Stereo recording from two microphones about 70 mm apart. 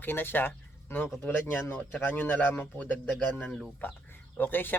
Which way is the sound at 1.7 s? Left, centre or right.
Centre.